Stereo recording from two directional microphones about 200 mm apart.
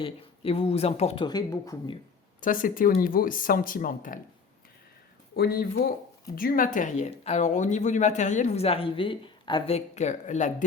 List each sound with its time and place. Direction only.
0.0 s speech: 30° left (ahead or behind)
2.4 s speech: 45° left (ahead or behind)
5.4 s speech: 50° left (ahead or behind)